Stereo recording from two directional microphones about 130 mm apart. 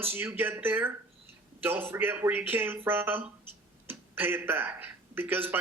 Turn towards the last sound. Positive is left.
turn(degrees=-15)  # may be behind; listen again after turning